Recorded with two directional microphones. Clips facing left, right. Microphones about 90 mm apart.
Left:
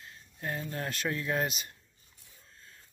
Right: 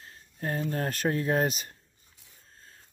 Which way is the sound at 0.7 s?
40° right (ahead or behind).